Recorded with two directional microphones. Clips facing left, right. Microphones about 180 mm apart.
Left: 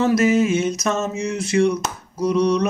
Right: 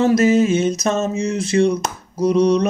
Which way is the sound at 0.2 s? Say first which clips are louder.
Right 3 dB; 35° right (ahead or behind).